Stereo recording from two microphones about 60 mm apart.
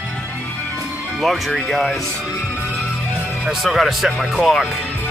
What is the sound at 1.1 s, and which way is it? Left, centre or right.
Speech, centre.